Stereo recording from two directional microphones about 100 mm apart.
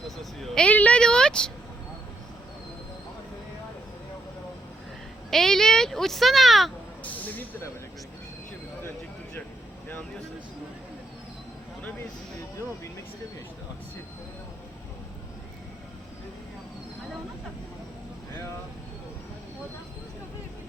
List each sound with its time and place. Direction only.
0.5 s a sound: 10° left (ahead or behind)
5.3 s speech: 5° left (ahead or behind)
7.0 s speech: 15° left (ahead or behind)
11.8 s speech: 15° left (ahead or behind)